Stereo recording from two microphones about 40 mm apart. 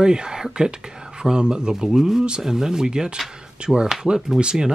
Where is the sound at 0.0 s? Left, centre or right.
Centre.